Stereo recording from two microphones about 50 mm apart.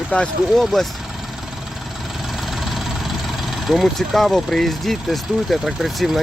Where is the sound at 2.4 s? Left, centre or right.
Centre.